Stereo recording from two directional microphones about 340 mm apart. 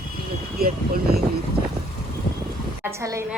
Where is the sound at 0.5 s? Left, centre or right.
Right.